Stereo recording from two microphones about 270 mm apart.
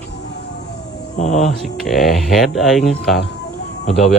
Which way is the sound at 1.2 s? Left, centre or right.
Left.